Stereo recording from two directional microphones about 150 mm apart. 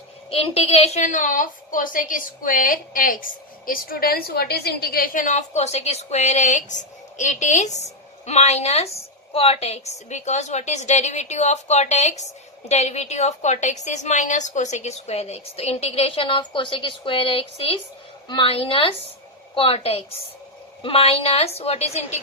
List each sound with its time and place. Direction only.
0.3 s a woman's voice: 40° left (ahead or behind); by 3.2 s 65° left (ahead or behind)
3.7 s a woman's voice: 85° left; by 22.2 s 45° left (ahead or behind)